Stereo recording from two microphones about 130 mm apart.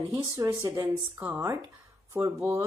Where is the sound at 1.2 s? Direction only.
10° right (ahead or behind).